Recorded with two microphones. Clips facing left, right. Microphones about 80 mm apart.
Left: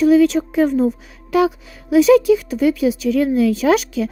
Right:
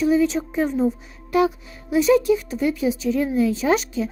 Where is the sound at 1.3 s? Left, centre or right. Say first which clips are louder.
Left 3 dB; left.